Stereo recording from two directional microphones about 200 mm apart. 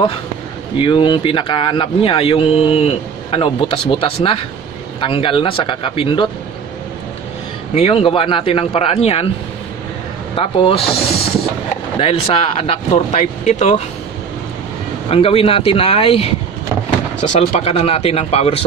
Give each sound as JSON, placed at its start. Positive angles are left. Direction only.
{"t": 0.7, "sound": "speech", "side_deg": 25}
{"t": 7.7, "sound": "speech", "side_deg": 30}
{"t": 10.3, "sound": "speech", "side_deg": 25}
{"t": 15.0, "sound": "speech", "side_deg": 30}